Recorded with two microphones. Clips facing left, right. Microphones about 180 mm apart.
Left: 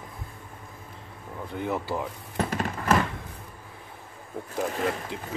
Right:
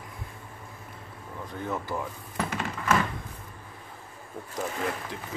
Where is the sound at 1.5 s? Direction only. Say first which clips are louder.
Left 3 dB; 15° left (ahead or behind).